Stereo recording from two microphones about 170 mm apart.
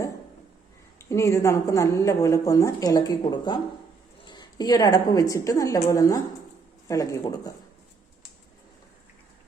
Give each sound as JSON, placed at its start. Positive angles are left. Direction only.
{"t": 1.1, "sound": "a woman's voice", "side_deg": 15}